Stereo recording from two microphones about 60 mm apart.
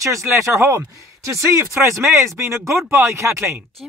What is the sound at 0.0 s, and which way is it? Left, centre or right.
Speech, right.